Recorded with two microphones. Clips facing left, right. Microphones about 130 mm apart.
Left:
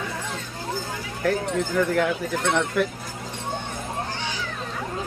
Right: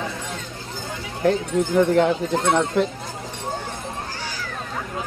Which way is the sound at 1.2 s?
20° right (ahead or behind).